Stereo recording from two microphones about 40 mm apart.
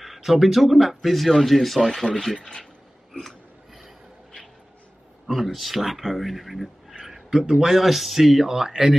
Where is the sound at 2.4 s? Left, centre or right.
Left.